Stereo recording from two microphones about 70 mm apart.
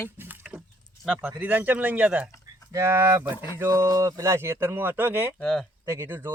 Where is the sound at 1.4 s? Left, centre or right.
Right.